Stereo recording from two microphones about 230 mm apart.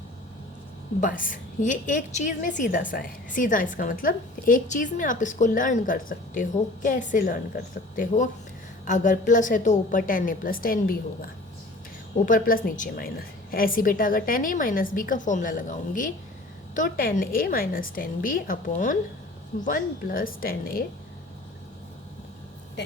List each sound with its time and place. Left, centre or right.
1.0 s a woman's voice: left